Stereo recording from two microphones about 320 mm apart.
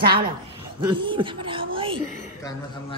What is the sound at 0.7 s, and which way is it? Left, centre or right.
A woman's voice, centre.